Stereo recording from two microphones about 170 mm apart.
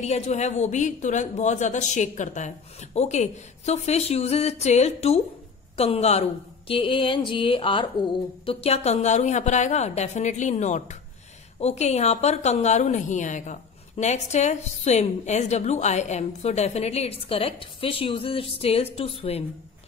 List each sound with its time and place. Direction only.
0.0 s a woman's voice: 40° left (ahead or behind)